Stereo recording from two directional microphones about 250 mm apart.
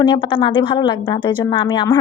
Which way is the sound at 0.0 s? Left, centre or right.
Centre.